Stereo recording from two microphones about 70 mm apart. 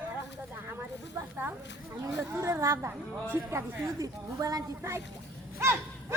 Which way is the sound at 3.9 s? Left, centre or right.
Right.